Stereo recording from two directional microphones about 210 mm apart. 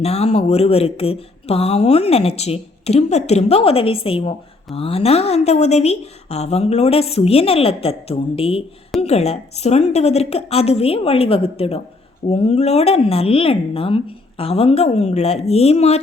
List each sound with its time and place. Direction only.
0.0 s speech: 30° left (ahead or behind)